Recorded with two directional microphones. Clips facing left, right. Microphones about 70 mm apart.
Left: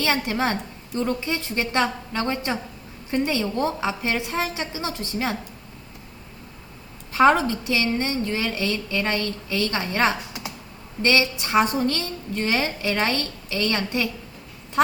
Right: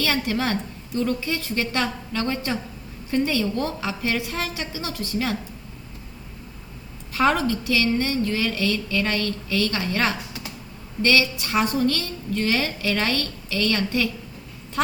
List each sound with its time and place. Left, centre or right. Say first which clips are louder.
0.0 s a woman's voice: left 1 dB; left
7.1 s a woman's voice: left 3 dB; left